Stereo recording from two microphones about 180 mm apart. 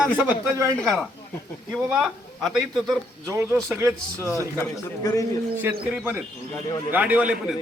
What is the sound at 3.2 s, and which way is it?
Speech, 15° right (ahead or behind).